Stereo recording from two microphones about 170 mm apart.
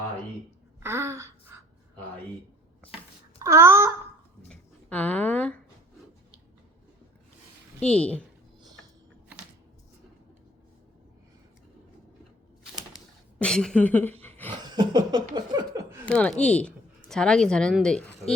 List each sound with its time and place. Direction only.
0.8 s gasp: 15° right (ahead or behind)
3.3 s babbling: 15° right (ahead or behind)
4.4 s a sound: 5° left (ahead or behind)
7.9 s a woman's voice: 5° left (ahead or behind)
13.4 s speech: 5° left (ahead or behind)
14.8 s laughter: 25° right (ahead or behind)
16.0 s a woman's voice: 5° left (ahead or behind)